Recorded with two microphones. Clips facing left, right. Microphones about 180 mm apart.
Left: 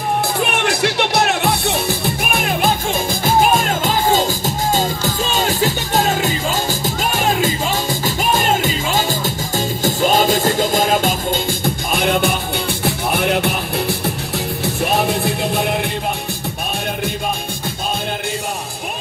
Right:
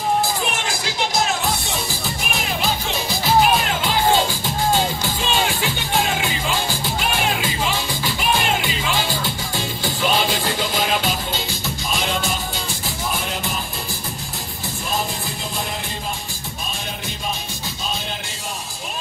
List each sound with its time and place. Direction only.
0.4 s music: 65° left (ahead or behind)